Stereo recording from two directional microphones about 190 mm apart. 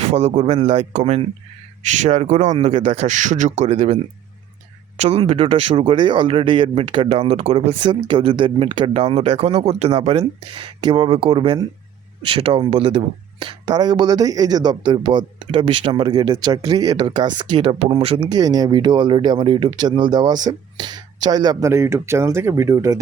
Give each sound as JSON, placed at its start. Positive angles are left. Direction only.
{"t": 0.1, "sound": "a man's voice", "side_deg": -35}